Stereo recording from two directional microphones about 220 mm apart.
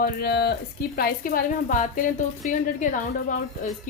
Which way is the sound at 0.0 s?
45° left (ahead or behind).